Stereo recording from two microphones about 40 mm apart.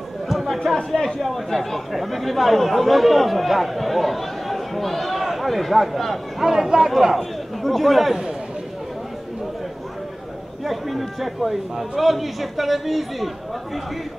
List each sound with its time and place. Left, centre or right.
0.3 s chatter: centre
0.7 s speech: centre
1.2 s speech: centre
6.4 s speech: centre
7.2 s a man's voice: centre
10.6 s speech: centre